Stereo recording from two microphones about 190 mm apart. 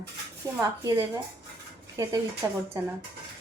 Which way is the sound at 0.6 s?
15° right (ahead or behind).